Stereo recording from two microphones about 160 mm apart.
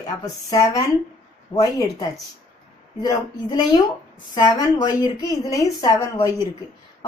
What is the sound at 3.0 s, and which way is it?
A woman's voice, 25° left (ahead or behind).